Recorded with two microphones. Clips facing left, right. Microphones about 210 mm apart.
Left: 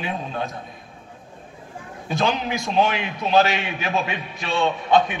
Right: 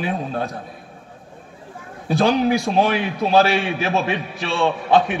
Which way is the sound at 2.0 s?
40° right (ahead or behind).